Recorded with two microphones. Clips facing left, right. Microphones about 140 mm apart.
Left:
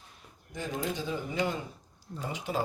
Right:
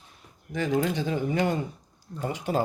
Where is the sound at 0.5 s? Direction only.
90° right; by 1.5 s 55° right (ahead or behind).